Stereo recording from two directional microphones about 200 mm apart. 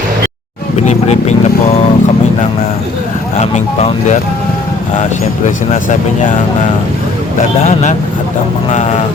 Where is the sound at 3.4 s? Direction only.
30° left (ahead or behind).